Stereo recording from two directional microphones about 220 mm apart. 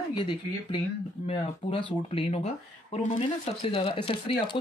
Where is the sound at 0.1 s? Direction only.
20° left (ahead or behind).